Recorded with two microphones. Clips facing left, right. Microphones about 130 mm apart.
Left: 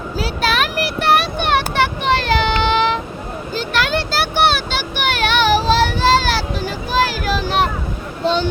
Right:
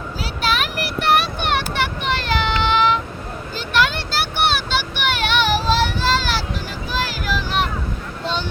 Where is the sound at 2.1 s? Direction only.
90° left.